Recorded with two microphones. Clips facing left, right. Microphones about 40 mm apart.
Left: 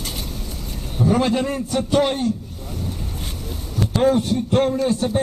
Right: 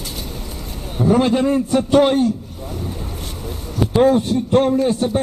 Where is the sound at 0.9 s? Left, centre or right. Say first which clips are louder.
Right 3 dB; right.